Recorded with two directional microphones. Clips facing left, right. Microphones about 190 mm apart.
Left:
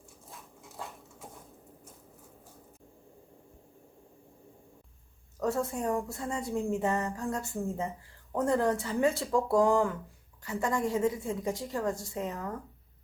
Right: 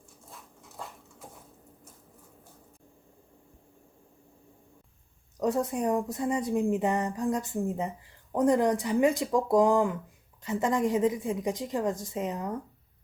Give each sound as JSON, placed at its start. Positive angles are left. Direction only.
{"t": 5.4, "sound": "a woman's voice", "side_deg": -20}